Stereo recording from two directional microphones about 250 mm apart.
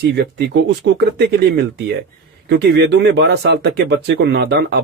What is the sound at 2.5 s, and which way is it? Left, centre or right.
Speech, right.